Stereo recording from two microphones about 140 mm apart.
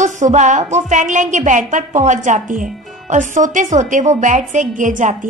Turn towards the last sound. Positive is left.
turn(degrees=-65)  # may be behind; listen again after turning